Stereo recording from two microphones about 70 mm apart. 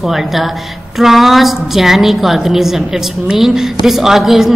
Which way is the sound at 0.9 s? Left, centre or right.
Centre.